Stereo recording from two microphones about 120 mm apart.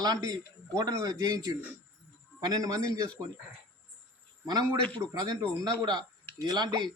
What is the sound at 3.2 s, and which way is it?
Speech, 15° right (ahead or behind).